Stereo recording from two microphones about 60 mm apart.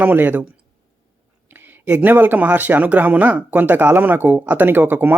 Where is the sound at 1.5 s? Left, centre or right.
Right.